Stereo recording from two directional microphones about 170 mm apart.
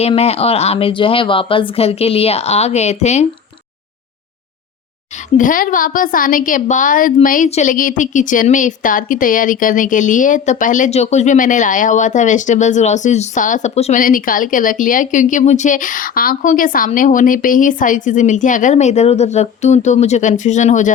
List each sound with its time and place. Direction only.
0.1 s a woman's voice: 35° left (ahead or behind)
5.4 s a woman's voice: 55° left (ahead or behind)
14.0 s a woman's voice: 55° left (ahead or behind)